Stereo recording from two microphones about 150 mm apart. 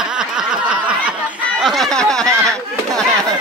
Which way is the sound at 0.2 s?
5° right (ahead or behind).